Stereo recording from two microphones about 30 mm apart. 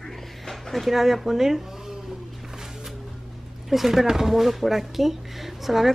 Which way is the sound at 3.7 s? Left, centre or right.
Centre.